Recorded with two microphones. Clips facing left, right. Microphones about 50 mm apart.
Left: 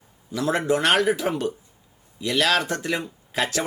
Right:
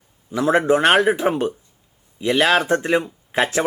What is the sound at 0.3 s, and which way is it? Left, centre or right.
Speech, right.